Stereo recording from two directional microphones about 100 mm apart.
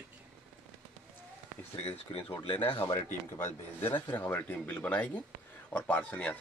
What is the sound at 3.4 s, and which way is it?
Speech, 20° left (ahead or behind).